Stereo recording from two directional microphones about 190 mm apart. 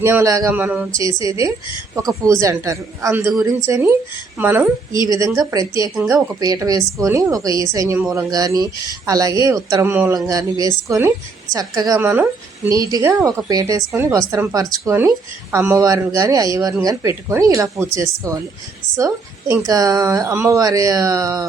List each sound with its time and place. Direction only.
0.0 s a woman's voice: 10° right (ahead or behind)
5.9 s a woman's voice: 5° right (ahead or behind)